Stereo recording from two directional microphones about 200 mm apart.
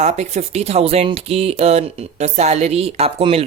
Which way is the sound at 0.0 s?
35° right (ahead or behind).